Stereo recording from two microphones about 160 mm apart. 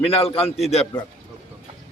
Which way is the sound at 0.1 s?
40° left (ahead or behind).